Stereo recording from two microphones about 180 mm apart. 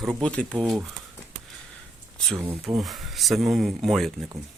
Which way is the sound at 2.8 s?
Centre (ahead or behind).